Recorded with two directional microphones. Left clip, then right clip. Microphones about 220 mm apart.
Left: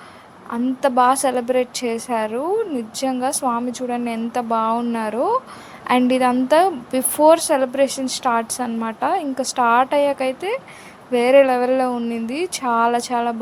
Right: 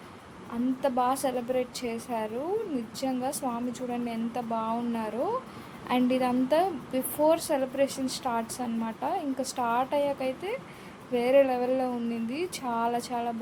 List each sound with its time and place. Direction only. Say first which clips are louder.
0.5 s a woman's voice: left 10 dB; 20° left (ahead or behind)